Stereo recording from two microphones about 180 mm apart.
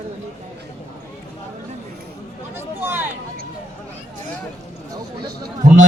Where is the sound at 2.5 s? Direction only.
10° right (ahead or behind).